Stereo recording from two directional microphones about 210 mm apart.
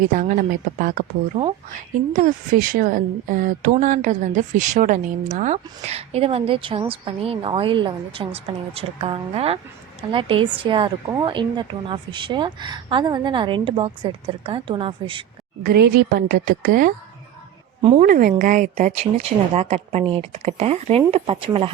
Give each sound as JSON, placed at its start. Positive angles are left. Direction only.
{"t": 0.0, "sound": "speech", "side_deg": -40}
{"t": 1.3, "sound": "speech", "side_deg": -30}
{"t": 1.7, "sound": "speech", "side_deg": -40}
{"t": 15.6, "sound": "a woman's voice", "side_deg": -50}
{"t": 18.0, "sound": "speech", "side_deg": -40}